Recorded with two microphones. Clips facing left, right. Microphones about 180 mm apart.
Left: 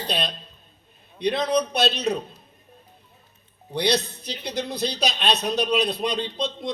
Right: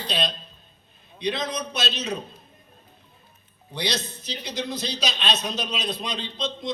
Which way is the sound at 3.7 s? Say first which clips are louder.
Left 6 dB; 60° left (ahead or behind).